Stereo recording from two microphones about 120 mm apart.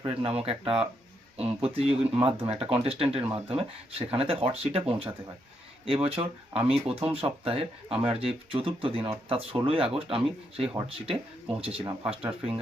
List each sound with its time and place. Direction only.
0.0 s speech: 50° right (ahead or behind)